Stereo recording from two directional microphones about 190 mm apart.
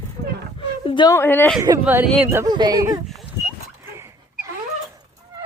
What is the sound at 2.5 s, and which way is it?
Speech, 20° right (ahead or behind).